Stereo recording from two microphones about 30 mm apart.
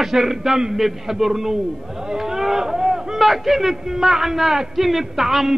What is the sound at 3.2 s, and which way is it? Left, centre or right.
A man's voice, centre.